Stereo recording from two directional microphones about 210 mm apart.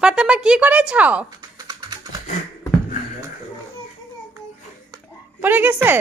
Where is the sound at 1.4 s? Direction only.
20° right (ahead or behind).